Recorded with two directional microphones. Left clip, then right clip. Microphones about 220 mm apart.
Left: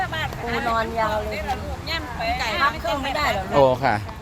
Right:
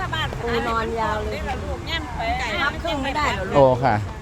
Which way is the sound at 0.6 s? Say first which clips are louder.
Left 3 dB; 25° left (ahead or behind).